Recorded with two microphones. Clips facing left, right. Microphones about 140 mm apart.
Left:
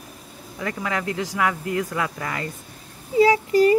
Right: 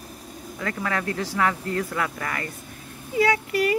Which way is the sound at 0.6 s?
15° left (ahead or behind).